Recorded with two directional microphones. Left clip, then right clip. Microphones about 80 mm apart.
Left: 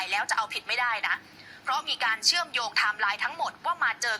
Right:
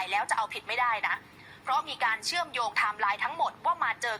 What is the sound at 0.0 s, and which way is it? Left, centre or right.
A woman's voice, right.